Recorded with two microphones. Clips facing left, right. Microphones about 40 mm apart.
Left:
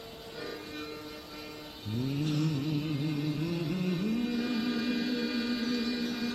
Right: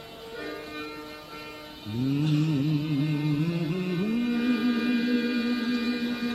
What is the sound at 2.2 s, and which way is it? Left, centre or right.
Music, right.